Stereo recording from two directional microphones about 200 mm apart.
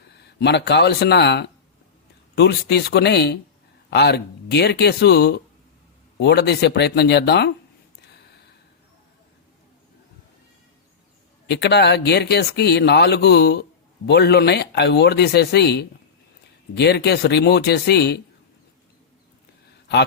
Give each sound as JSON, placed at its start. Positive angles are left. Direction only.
{"t": 0.1, "sound": "speech", "side_deg": 55}
{"t": 11.4, "sound": "speech", "side_deg": 60}